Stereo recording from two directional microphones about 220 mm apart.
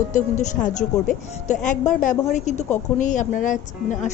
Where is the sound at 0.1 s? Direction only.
35° left (ahead or behind).